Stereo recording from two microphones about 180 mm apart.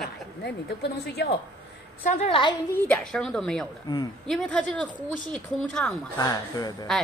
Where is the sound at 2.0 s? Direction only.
45° left (ahead or behind).